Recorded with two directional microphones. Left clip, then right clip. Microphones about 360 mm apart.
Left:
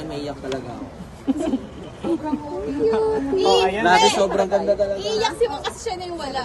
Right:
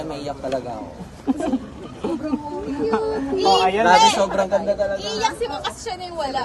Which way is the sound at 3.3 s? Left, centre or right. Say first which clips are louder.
Right 2 dB; centre.